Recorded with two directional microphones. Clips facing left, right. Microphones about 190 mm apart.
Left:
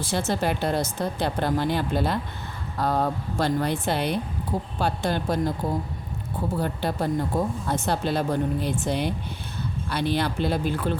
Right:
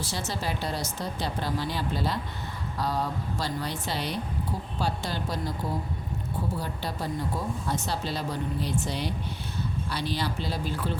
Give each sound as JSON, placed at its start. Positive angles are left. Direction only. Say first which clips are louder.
{"t": 0.0, "sound": "speech", "louder": "left 7 dB", "side_deg": 55}
{"t": 6.6, "sound": "speech", "louder": "left 7 dB", "side_deg": 55}